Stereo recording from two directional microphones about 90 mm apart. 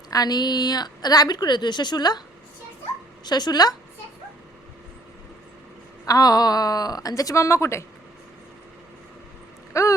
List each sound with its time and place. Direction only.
0.1 s a woman's voice: 45° left (ahead or behind)
3.2 s a woman's voice: 50° left (ahead or behind)
6.1 s a woman's voice: 45° left (ahead or behind)
9.7 s a sound: 35° left (ahead or behind)